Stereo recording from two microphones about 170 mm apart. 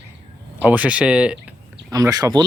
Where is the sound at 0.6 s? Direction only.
10° right (ahead or behind).